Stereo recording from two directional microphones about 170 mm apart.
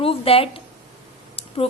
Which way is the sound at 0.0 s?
35° left (ahead or behind).